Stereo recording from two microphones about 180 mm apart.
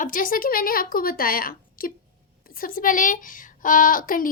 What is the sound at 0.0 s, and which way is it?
Speech, 50° left (ahead or behind).